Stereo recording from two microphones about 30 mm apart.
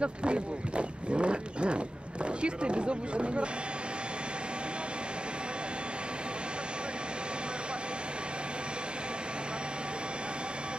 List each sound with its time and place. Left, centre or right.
0.0 s speech: right